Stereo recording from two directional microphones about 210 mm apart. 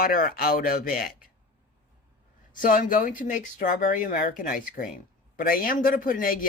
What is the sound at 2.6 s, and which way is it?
Speech, 40° left (ahead or behind).